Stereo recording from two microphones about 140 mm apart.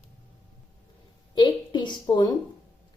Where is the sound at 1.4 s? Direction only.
35° left (ahead or behind).